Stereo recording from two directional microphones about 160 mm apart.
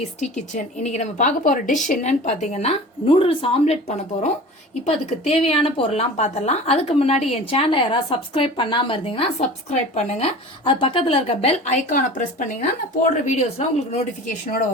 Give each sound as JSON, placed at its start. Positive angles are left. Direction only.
{"t": 0.0, "sound": "a woman's voice", "side_deg": 45}